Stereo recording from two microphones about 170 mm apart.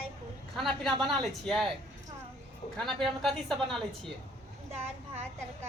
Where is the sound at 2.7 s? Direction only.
Centre (ahead or behind).